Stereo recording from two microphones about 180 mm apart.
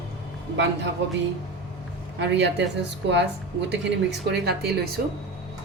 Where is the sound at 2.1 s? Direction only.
75° right (ahead or behind).